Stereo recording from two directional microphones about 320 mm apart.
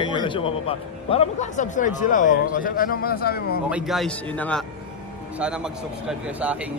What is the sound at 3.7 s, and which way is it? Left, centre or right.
Speech, centre.